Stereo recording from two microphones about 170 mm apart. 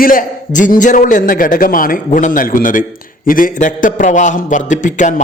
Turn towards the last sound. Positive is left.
turn(degrees=45)  # may be behind; listen again after turning